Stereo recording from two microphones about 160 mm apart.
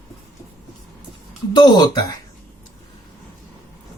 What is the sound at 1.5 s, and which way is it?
Speech, 25° left (ahead or behind).